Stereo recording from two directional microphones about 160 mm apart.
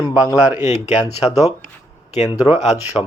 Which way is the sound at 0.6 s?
45° left (ahead or behind).